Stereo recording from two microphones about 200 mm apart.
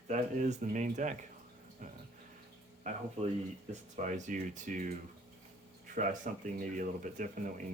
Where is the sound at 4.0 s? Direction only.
40° right (ahead or behind).